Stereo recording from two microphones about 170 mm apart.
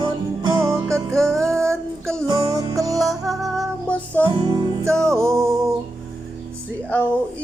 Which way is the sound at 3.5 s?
5° left (ahead or behind).